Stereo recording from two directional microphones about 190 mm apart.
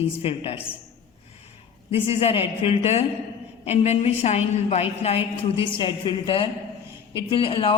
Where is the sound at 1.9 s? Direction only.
30° left (ahead or behind).